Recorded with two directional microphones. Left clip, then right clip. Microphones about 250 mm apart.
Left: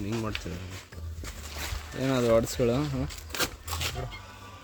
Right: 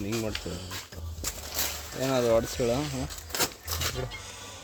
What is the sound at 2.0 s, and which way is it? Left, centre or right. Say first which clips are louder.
Speech: even; left.